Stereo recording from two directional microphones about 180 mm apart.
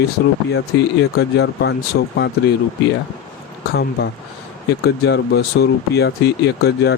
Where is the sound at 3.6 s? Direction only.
65° left (ahead or behind).